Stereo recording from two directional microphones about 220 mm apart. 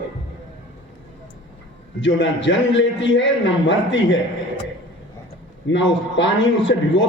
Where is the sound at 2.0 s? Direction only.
55° left (ahead or behind).